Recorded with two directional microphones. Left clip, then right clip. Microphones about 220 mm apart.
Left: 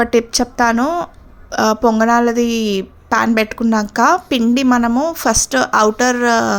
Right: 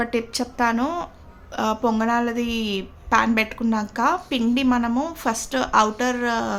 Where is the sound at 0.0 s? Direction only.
30° left (ahead or behind).